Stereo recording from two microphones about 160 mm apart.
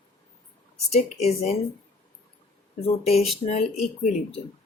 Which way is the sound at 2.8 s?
40° left (ahead or behind).